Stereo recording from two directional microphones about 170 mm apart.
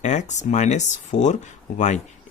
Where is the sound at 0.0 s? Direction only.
45° left (ahead or behind).